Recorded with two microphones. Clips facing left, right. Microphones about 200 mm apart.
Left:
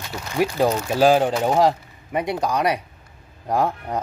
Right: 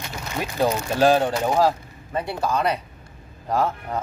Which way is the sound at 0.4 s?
10° left (ahead or behind).